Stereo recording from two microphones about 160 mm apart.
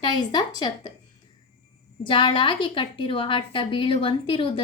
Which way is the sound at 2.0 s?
30° left (ahead or behind).